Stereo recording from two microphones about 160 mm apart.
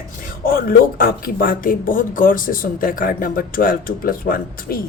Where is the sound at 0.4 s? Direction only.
65° left (ahead or behind).